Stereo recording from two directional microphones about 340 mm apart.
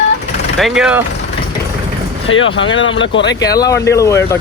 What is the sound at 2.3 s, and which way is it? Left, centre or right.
Speech, left.